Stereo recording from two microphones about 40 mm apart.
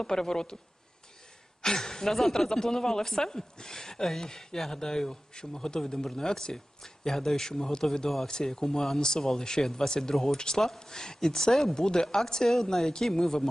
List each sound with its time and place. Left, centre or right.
0.0 s a woman's voice: centre
1.6 s a woman's voice: centre